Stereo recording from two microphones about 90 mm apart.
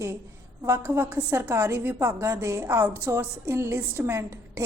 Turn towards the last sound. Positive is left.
turn(degrees=-30)  # may be behind; listen again after turning